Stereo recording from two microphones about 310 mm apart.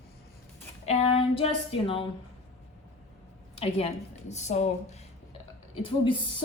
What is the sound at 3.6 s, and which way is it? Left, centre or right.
Speech, centre.